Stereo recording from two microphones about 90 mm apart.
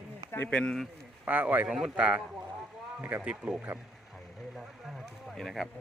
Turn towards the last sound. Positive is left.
turn(degrees=0)  # may be behind; listen again after turning